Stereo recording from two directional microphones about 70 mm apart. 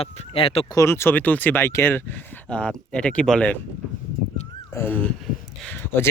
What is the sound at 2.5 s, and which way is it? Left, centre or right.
Speech, centre.